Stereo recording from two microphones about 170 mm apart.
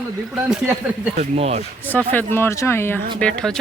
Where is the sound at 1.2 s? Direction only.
40° right (ahead or behind).